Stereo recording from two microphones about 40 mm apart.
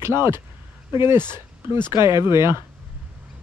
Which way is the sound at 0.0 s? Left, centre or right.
Right.